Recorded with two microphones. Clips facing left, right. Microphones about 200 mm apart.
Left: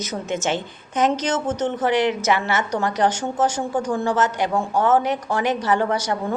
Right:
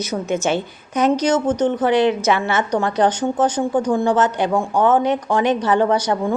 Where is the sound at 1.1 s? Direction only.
15° right (ahead or behind).